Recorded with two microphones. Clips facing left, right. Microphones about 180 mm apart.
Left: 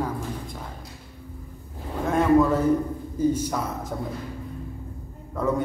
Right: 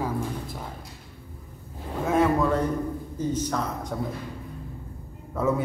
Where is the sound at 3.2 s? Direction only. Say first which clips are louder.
Left 4 dB; 10° left (ahead or behind).